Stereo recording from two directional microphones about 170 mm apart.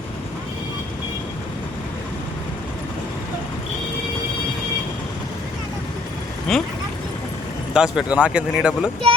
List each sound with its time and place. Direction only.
6.5 s speech: centre (ahead or behind)
7.7 s speech: 5° right (ahead or behind)